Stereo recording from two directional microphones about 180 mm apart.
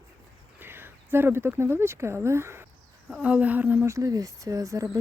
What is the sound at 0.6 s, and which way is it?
Speech, 10° right (ahead or behind).